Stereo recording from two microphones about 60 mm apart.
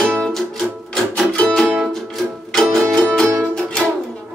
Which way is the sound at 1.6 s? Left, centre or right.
Centre.